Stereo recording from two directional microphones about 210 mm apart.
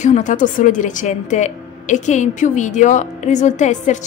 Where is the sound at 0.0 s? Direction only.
35° left (ahead or behind).